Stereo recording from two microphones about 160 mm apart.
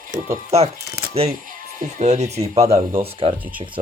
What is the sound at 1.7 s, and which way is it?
Speech, 50° right (ahead or behind).